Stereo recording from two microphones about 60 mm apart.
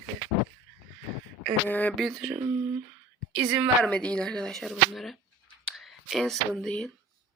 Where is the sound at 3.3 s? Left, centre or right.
Centre.